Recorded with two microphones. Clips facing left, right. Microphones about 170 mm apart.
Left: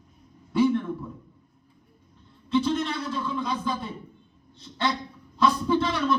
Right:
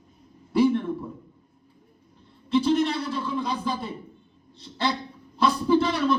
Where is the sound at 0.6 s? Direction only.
30° right (ahead or behind).